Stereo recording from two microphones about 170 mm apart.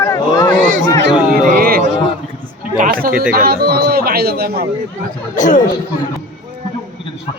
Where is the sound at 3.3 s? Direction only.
65° right (ahead or behind).